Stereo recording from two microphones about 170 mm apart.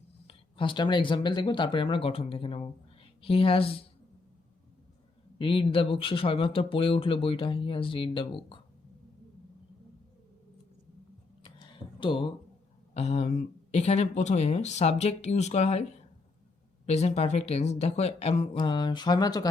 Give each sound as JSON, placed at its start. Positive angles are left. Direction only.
{"t": 0.3, "sound": "speech", "side_deg": 30}
{"t": 5.4, "sound": "speech", "side_deg": 30}
{"t": 11.4, "sound": "a sound", "side_deg": 30}
{"t": 12.9, "sound": "speech", "side_deg": 40}